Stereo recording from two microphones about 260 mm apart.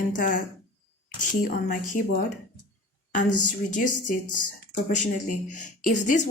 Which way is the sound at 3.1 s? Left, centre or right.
Left.